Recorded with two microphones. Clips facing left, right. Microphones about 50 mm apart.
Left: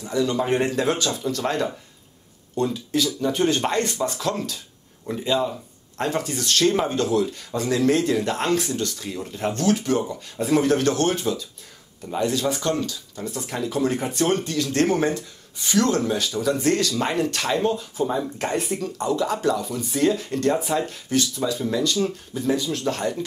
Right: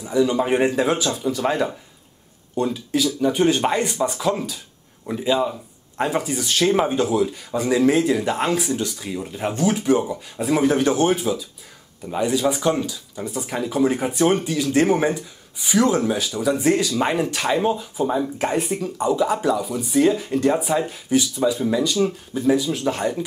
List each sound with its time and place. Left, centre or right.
0.0 s speech: centre